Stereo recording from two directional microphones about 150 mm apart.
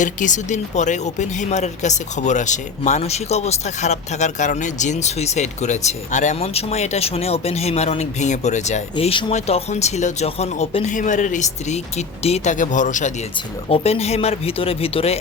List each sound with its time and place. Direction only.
0.0 s speech: 55° left (ahead or behind)
10.8 s speech: 55° left (ahead or behind)
13.7 s speech: 40° left (ahead or behind)